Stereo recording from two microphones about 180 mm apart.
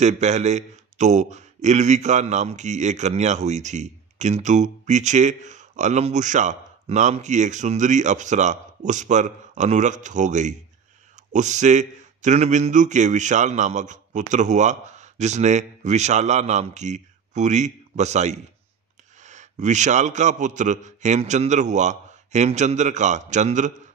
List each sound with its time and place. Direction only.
0.0 s speech: 40° right (ahead or behind)